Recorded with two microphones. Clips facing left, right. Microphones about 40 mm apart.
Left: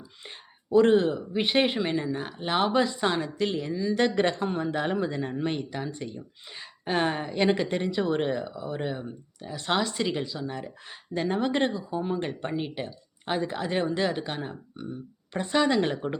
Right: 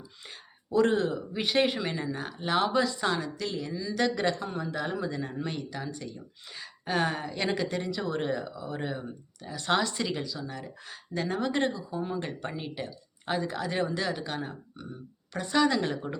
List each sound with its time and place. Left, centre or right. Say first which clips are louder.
0.3 s a sound: left 7 dB; left
1.1 s speech: left 3 dB; left
10.1 s speech: left 4 dB; left
11.7 s speech: left 3 dB; left
12.0 s speech: left 4 dB; left